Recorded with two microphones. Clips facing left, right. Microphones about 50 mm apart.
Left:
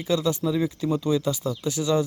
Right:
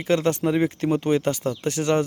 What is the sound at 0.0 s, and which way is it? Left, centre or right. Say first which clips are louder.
A man's voice: right 3 dB; right.